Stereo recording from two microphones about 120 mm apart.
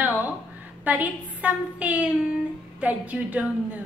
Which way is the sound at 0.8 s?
15° right (ahead or behind).